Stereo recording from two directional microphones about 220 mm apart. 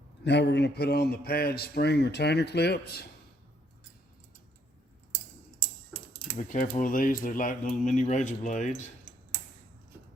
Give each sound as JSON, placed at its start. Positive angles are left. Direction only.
{"t": 0.3, "sound": "speech", "side_deg": 50}
{"t": 5.6, "sound": "a sound", "side_deg": 5}
{"t": 6.5, "sound": "speech", "side_deg": 35}